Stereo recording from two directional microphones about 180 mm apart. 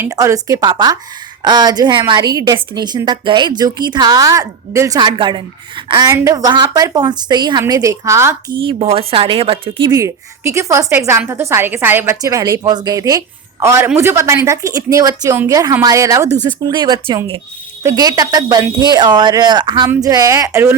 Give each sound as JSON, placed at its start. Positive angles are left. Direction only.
{"t": 0.0, "sound": "a woman's voice", "side_deg": -15}
{"t": 8.5, "sound": "speech", "side_deg": -30}
{"t": 9.9, "sound": "a woman's voice", "side_deg": -15}